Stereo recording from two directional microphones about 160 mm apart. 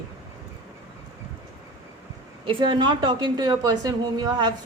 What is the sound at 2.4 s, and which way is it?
A woman's voice, 30° right (ahead or behind).